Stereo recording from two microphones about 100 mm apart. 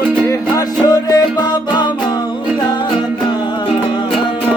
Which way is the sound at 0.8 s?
40° left (ahead or behind).